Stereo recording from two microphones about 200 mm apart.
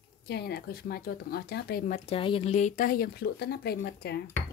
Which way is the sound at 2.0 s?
25° left (ahead or behind).